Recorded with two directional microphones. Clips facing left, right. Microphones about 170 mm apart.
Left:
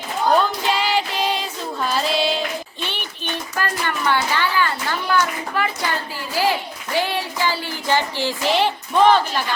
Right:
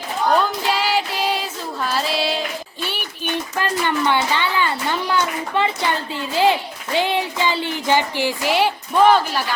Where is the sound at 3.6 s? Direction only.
20° right (ahead or behind).